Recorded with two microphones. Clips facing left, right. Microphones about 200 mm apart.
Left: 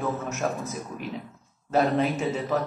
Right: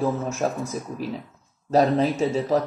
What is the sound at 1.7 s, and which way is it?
Speech, 30° right (ahead or behind).